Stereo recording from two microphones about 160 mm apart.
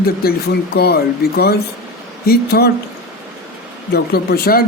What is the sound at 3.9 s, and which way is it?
Speech, 80° left.